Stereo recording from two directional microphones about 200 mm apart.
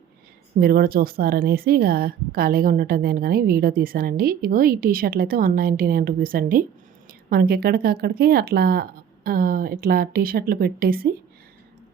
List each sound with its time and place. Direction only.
0.6 s speech: 50° right (ahead or behind)